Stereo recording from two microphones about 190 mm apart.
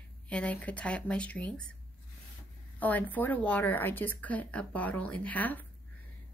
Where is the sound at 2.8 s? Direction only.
10° left (ahead or behind).